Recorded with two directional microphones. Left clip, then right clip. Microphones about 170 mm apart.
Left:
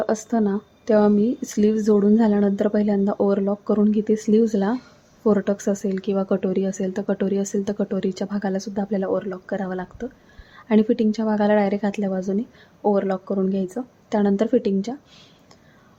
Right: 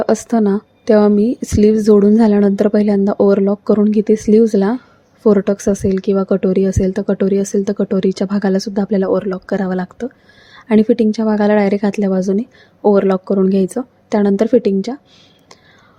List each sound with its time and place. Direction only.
0.0 s speech: 30° right (ahead or behind)